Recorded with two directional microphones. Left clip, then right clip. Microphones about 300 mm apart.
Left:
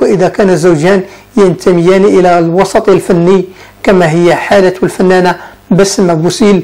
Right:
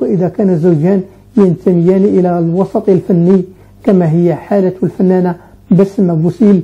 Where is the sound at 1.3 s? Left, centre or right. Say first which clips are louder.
Left 4 dB; left.